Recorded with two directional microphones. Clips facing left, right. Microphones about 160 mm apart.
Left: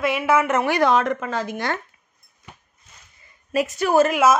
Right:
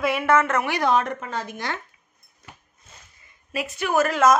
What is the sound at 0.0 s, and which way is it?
Speech, centre (ahead or behind).